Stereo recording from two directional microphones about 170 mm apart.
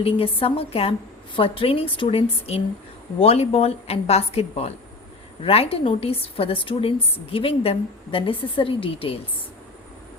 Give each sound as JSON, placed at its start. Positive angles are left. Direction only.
{"t": 0.0, "sound": "a woman's voice", "side_deg": 35}